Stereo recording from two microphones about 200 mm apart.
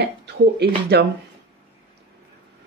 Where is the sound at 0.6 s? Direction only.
50° right (ahead or behind).